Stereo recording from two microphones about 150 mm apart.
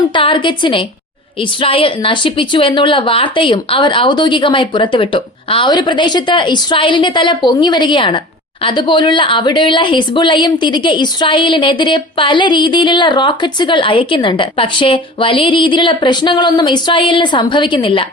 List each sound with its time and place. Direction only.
0.1 s a woman's voice: 35° left (ahead or behind)